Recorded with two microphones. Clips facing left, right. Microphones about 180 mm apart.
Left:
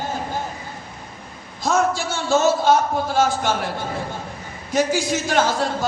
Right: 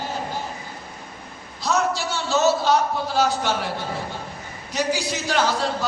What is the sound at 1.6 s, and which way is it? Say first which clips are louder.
A man's voice: left 3 dB; 50° left (ahead or behind).